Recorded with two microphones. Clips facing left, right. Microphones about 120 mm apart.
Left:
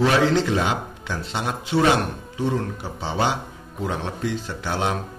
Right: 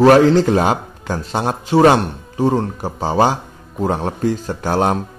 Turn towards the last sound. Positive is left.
turn(degrees=-45)  # may be behind; listen again after turning